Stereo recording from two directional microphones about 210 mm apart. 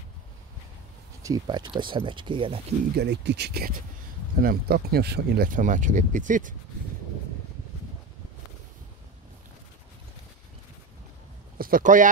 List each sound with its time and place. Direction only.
1.2 s speech: 20° right (ahead or behind)
3.0 s speech: 55° right (ahead or behind); by 6.5 s 40° right (ahead or behind)
11.5 s speech: 45° right (ahead or behind)